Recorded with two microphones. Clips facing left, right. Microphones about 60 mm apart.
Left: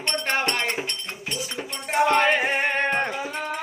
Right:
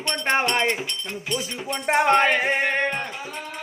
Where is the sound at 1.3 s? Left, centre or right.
Right.